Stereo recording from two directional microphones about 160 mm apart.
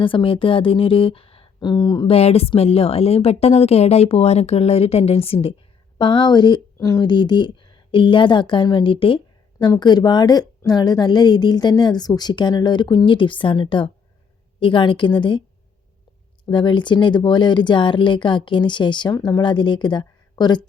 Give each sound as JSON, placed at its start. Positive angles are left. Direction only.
{"t": 0.0, "sound": "a woman's voice", "side_deg": 30}
{"t": 16.5, "sound": "a woman's voice", "side_deg": 30}